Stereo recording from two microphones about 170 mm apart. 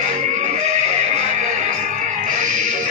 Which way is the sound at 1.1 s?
45° right (ahead or behind).